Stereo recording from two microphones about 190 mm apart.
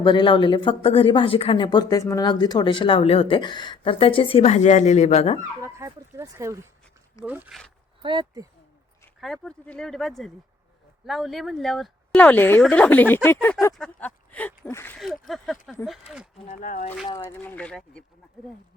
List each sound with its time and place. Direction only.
0.0 s speech: 25° left (ahead or behind)
5.6 s speech: 15° right (ahead or behind)
8.0 s speech: 25° right (ahead or behind)
9.2 s a woman's voice: centre (ahead or behind)
14.9 s a woman's voice: centre (ahead or behind)
16.5 s speech: 40° left (ahead or behind)
17.2 s speech: 10° left (ahead or behind)